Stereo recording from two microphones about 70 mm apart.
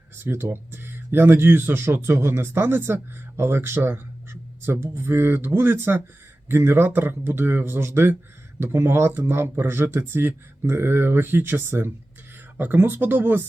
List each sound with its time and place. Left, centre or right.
0.5 s speech: right